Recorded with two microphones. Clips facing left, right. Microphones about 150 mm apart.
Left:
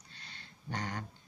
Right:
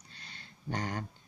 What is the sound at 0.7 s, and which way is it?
Speech, 30° right (ahead or behind).